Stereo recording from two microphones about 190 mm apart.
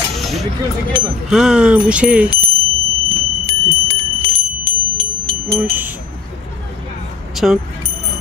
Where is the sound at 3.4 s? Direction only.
15° right (ahead or behind).